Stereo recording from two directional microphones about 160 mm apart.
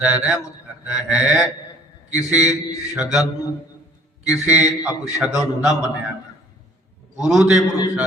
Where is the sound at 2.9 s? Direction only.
5° right (ahead or behind).